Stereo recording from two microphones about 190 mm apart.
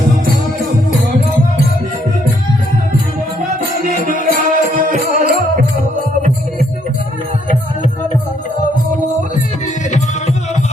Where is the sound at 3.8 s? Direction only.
45° right (ahead or behind).